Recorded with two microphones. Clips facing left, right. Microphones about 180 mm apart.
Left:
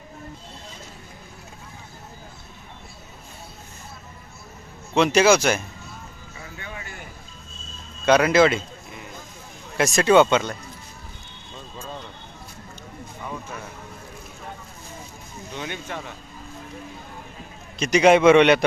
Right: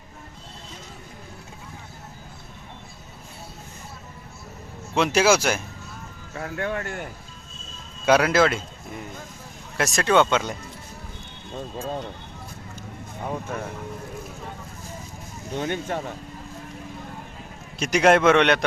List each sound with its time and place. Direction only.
4.9 s a man's voice: 5° right (ahead or behind)
6.3 s speech: 75° right (ahead or behind)
8.0 s a man's voice: 5° right (ahead or behind)
9.7 s a man's voice: centre (ahead or behind)
15.5 s speech: 45° right (ahead or behind)
17.7 s a man's voice: centre (ahead or behind)